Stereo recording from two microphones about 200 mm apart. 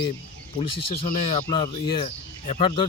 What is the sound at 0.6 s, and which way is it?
Speech, 25° left (ahead or behind).